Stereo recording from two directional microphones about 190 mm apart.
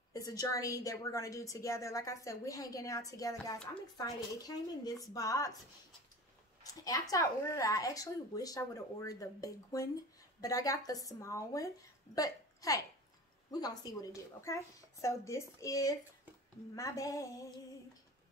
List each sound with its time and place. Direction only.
0.1 s a woman's voice: 20° left (ahead or behind)
6.6 s a woman's voice: 20° left (ahead or behind)